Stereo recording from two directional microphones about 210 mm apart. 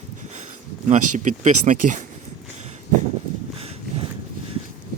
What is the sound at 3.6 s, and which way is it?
Horse, 30° right (ahead or behind).